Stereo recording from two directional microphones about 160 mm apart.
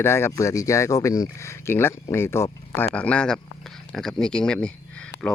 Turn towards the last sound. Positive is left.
turn(degrees=5)  # may be behind; listen again after turning